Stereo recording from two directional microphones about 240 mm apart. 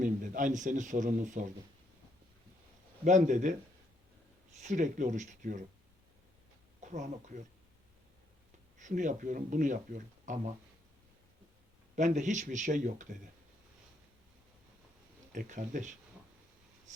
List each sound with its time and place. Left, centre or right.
0.0 s speech: right
3.0 s speech: right
4.6 s speech: right
6.8 s speech: right
8.8 s speech: right
11.9 s speech: right
15.3 s speech: right